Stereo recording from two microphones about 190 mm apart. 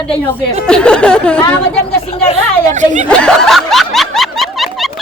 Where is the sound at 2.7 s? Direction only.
40° right (ahead or behind).